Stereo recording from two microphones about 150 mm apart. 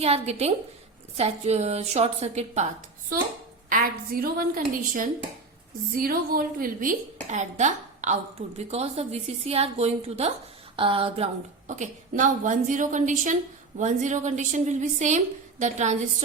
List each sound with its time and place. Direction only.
0.0 s a woman's voice: 45° right (ahead or behind)
3.7 s a woman's voice: 75° right (ahead or behind); by 10.3 s 45° right (ahead or behind)
10.8 s a sound: 35° right (ahead or behind)
11.8 s a woman's voice: 60° right (ahead or behind)